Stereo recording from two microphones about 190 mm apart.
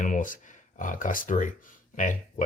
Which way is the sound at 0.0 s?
45° left (ahead or behind).